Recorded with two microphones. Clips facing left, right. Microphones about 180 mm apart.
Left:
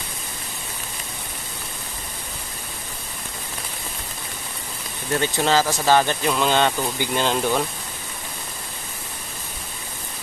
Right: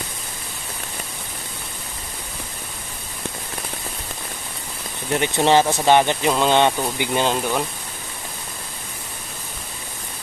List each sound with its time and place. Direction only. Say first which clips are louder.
5.1 s speech: right 3 dB; 20° right (ahead or behind)